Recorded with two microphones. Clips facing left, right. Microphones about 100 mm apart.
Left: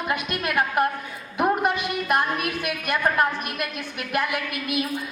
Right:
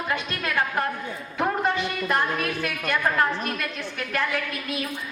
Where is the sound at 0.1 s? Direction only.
20° left (ahead or behind).